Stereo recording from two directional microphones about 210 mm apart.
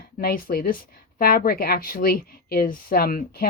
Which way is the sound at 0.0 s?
45° left (ahead or behind).